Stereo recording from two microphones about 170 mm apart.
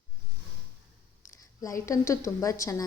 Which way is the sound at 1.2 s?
20° left (ahead or behind).